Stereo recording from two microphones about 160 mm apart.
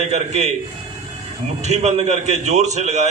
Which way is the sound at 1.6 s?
45° right (ahead or behind).